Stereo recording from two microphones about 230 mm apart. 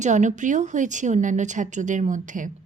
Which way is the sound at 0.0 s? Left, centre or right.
Right.